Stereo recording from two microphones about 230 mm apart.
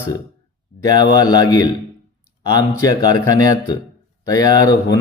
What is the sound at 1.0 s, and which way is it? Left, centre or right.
Speech, centre.